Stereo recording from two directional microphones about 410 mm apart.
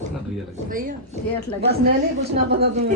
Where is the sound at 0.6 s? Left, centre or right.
Centre.